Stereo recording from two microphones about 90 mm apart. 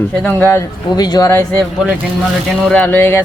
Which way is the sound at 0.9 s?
45° left (ahead or behind).